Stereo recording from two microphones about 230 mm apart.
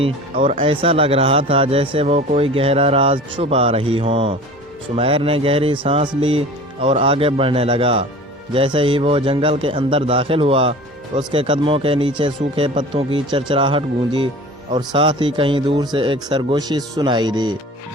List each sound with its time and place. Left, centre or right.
0.0 s a man's voice: right